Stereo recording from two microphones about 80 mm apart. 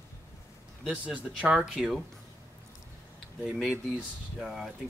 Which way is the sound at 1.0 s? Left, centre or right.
Centre.